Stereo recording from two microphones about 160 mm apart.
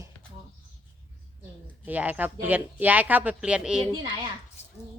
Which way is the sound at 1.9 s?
10° right (ahead or behind).